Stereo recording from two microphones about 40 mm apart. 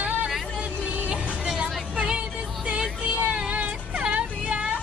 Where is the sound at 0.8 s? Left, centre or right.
Right.